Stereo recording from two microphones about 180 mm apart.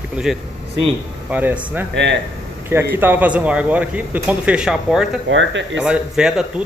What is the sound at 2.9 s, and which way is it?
A man's voice, 10° right (ahead or behind).